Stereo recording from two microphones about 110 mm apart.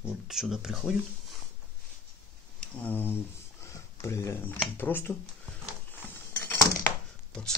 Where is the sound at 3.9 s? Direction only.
25° left (ahead or behind).